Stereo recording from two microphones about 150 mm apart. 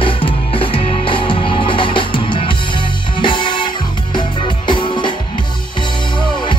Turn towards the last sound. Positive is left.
turn(degrees=35)  # may be behind; listen again after turning